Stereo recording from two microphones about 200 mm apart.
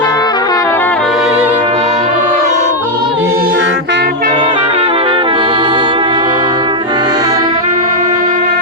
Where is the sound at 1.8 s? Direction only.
35° right (ahead or behind).